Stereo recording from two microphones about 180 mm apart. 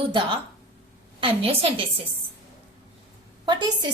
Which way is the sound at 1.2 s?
30° right (ahead or behind).